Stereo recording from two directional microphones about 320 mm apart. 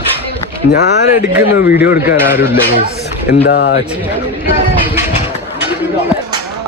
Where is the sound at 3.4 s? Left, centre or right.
Left.